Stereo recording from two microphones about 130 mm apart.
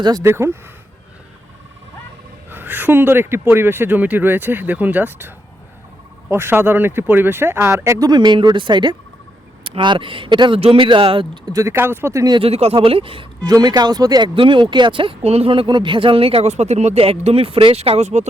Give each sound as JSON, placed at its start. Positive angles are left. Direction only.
{"t": 0.0, "sound": "speech", "side_deg": -30}
{"t": 2.5, "sound": "speech", "side_deg": -15}
{"t": 6.3, "sound": "speech", "side_deg": -15}
{"t": 11.5, "sound": "speech", "side_deg": -20}
{"t": 12.4, "sound": "speech", "side_deg": -50}
{"t": 13.4, "sound": "speech", "side_deg": -30}